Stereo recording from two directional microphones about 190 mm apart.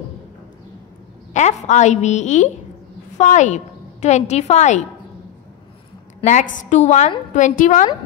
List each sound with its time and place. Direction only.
1.3 s a woman's voice: 40° left (ahead or behind)
6.4 s a woman's voice: 80° left
6.7 s a woman's voice: 40° left (ahead or behind)